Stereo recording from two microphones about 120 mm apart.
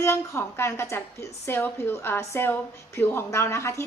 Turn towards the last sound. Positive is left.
turn(degrees=25)  # may be behind; listen again after turning